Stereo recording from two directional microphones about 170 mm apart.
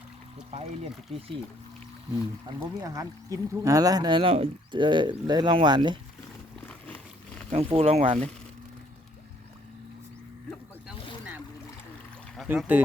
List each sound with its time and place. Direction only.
2.5 s speech: 25° right (ahead or behind)
6.7 s a sound: 10° left (ahead or behind)
7.5 s speech: 35° right (ahead or behind)
12.5 s speech: 10° right (ahead or behind)